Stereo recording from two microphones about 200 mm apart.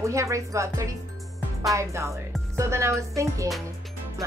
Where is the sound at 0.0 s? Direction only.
15° right (ahead or behind).